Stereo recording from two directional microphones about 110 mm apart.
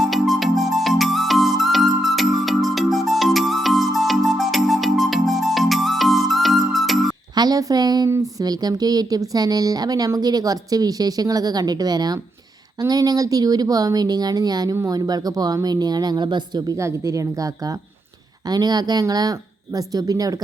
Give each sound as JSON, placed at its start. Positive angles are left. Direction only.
{"t": 0.0, "sound": "music", "side_deg": 0}
{"t": 7.3, "sound": "speech", "side_deg": -35}
{"t": 16.7, "sound": "speech", "side_deg": -25}